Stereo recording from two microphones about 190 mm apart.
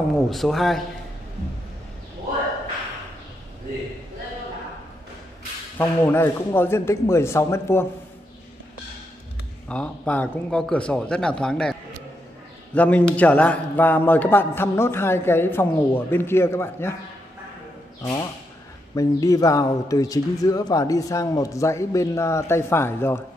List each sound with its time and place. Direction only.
0.3 s speech: centre (ahead or behind)
5.8 s speech: 10° left (ahead or behind)
9.7 s speech: 5° left (ahead or behind)
12.7 s speech: 10° left (ahead or behind)
18.9 s speech: 15° left (ahead or behind)